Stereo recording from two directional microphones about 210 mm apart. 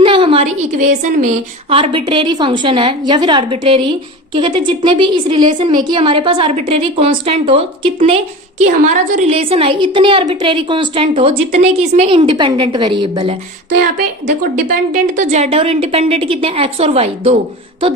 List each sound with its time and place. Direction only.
0.0 s a woman's voice: 25° right (ahead or behind)
1.7 s a woman's voice: 25° right (ahead or behind)
8.6 s a woman's voice: 35° right (ahead or behind)
14.4 s a woman's voice: 40° right (ahead or behind)